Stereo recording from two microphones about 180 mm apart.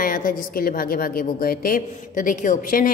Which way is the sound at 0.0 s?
50° left (ahead or behind).